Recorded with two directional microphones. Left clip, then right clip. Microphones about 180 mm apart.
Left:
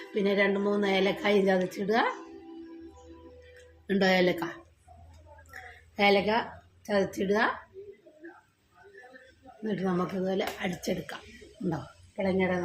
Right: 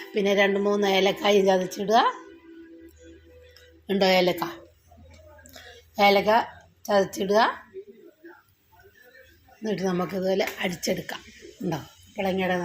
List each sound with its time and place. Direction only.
0.1 s a woman's voice: 20° right (ahead or behind)
3.8 s a woman's voice: 5° right (ahead or behind)
6.0 s a woman's voice: 15° right (ahead or behind)
9.6 s speech: 20° right (ahead or behind)
12.1 s speech: 35° right (ahead or behind)